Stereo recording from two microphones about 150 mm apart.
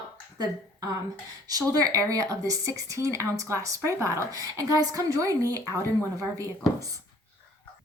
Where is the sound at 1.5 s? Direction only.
25° right (ahead or behind).